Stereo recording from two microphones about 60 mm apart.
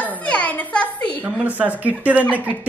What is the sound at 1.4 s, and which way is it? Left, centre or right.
Speech, right.